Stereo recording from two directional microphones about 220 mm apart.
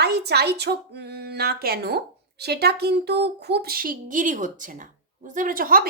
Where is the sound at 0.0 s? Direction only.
50° right (ahead or behind).